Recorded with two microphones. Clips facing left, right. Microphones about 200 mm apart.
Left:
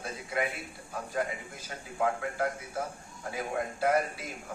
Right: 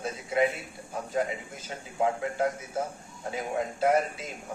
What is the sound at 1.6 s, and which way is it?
A man's voice, 20° right (ahead or behind).